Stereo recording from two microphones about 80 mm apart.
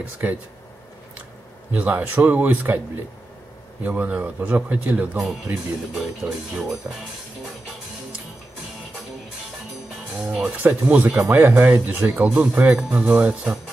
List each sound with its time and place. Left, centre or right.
0.2 s speech: right
1.7 s speech: centre
3.8 s speech: right
5.9 s speech: centre
10.4 s speech: right